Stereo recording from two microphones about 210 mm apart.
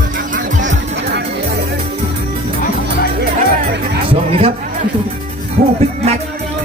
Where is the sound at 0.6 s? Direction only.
55° right (ahead or behind).